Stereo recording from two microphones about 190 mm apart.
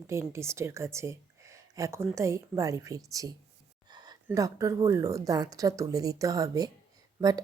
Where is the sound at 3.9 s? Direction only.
20° right (ahead or behind).